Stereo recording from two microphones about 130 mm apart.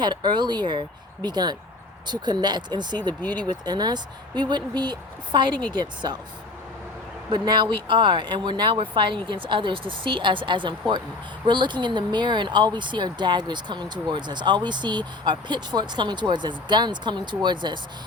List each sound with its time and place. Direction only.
0.0 s speech: 35° right (ahead or behind)
7.3 s speech: 35° right (ahead or behind)